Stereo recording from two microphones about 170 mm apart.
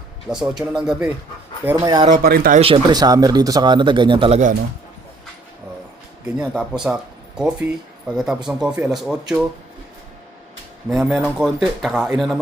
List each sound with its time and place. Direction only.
0.3 s speech: 5° right (ahead or behind)
1.6 s speech: 20° right (ahead or behind)
2.2 s speech: 60° right (ahead or behind)
2.6 s speech: 35° right (ahead or behind)
6.2 s speech: 5° right (ahead or behind)
10.8 s speech: 5° right (ahead or behind)